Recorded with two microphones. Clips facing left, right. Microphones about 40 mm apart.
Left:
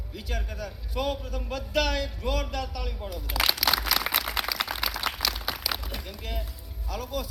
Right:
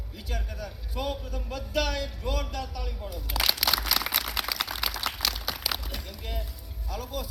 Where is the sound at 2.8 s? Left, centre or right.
Left.